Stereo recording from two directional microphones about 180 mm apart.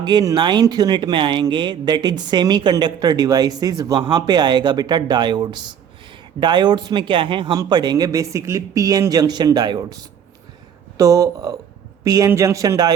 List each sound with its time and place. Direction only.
0.0 s speech: 25° right (ahead or behind)